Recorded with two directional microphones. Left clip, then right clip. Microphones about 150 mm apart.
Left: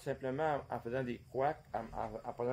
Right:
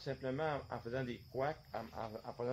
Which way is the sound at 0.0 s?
20° left (ahead or behind).